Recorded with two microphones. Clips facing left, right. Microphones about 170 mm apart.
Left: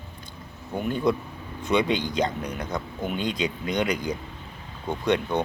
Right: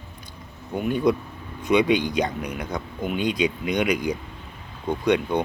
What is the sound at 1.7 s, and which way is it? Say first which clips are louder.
Speech: right 4 dB; 15° right (ahead or behind).